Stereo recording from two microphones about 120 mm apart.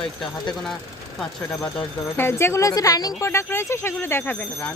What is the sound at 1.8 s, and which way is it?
Speech, 20° left (ahead or behind).